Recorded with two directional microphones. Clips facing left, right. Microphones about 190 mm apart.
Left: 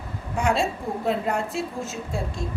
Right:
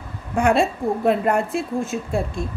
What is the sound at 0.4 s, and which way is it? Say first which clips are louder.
A woman's voice: right 6 dB; 55° right (ahead or behind).